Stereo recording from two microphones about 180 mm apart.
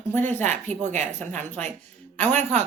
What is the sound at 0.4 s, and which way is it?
Speech, 40° right (ahead or behind).